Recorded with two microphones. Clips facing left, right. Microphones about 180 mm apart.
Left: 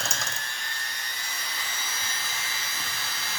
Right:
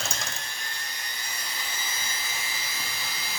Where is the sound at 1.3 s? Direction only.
10° right (ahead or behind).